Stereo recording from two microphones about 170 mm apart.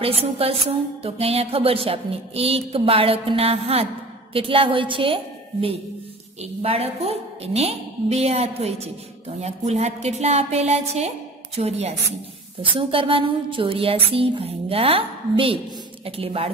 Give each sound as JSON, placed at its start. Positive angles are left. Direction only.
{"t": 0.0, "sound": "music", "side_deg": -35}